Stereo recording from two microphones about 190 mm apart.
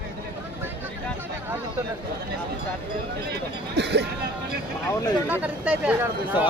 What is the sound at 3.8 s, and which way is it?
Speech, 65° right (ahead or behind).